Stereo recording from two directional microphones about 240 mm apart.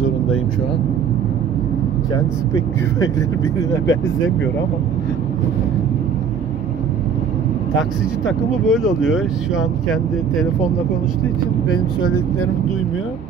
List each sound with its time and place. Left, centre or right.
2.1 s speech: centre
8.5 s speech: centre